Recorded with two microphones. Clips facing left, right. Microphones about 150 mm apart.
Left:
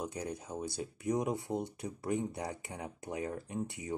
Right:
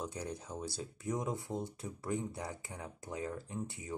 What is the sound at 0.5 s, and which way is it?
Speech, 15° left (ahead or behind).